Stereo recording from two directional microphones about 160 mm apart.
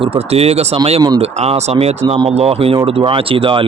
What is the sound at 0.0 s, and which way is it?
Speech, 35° right (ahead or behind).